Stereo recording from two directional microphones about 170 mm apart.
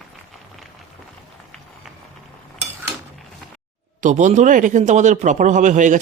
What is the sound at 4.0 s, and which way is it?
A man's voice, 45° right (ahead or behind).